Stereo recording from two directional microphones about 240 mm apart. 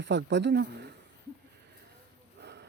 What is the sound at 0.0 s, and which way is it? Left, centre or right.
Speech, right.